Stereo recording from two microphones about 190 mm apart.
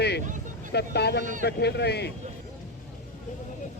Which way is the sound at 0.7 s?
60° left (ahead or behind).